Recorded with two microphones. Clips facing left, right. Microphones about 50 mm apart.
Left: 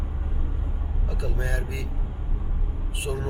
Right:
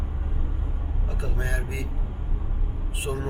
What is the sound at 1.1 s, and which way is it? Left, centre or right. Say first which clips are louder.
Speech: left 1 dB; right.